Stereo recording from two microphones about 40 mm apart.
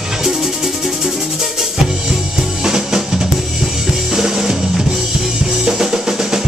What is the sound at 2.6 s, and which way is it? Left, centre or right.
Drum, centre.